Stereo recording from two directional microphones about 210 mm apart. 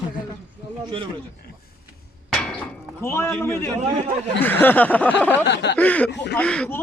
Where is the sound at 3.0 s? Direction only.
10° left (ahead or behind).